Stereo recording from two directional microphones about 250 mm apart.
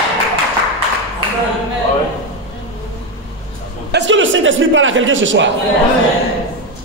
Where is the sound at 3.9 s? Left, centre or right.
Right.